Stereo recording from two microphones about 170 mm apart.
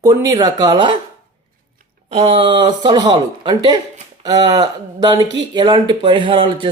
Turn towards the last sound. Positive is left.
turn(degrees=-30)  # may be behind; listen again after turning